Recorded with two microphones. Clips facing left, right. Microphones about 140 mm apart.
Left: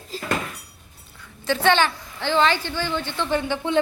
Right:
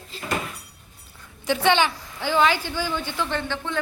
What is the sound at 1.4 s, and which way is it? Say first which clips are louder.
A woman's voice: left 1 dB; 15° right (ahead or behind).